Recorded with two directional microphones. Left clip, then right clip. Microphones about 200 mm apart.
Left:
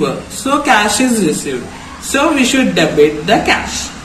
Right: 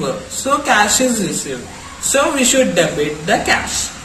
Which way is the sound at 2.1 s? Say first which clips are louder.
Left 2 dB; 35° right (ahead or behind).